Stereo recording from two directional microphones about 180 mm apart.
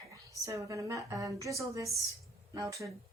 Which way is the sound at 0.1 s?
20° right (ahead or behind).